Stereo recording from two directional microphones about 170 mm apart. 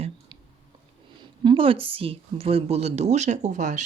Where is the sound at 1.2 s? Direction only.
30° right (ahead or behind).